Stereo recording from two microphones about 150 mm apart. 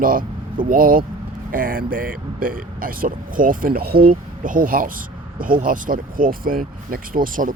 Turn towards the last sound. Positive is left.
turn(degrees=-65)  # may be behind; listen again after turning